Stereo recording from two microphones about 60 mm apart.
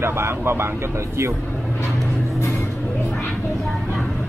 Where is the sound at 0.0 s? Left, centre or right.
Right.